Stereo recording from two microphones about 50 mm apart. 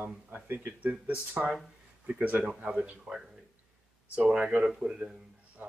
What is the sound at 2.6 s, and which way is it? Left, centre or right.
Speech, centre.